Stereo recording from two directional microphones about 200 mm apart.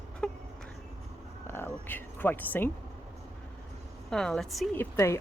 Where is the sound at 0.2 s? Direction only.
5° left (ahead or behind).